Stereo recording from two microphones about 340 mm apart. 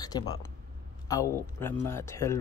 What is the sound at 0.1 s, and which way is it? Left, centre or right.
A man's voice, centre.